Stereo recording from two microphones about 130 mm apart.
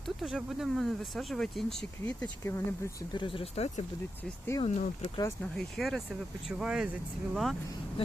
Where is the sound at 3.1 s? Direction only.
40° left (ahead or behind).